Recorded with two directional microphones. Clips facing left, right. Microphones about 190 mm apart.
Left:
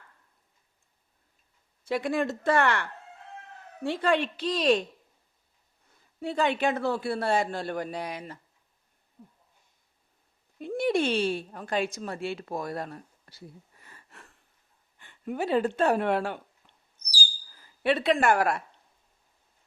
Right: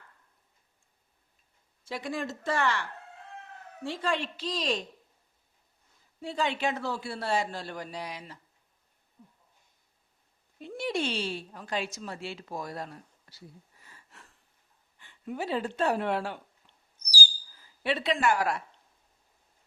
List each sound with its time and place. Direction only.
1.8 s speech: 60° left (ahead or behind)
3.8 s speech: 60° left (ahead or behind)
6.1 s speech: 55° left (ahead or behind)
10.6 s speech: 55° left (ahead or behind)
13.8 s a sound: 60° left (ahead or behind)
14.9 s speech: 55° left (ahead or behind)
17.8 s speech: 55° left (ahead or behind)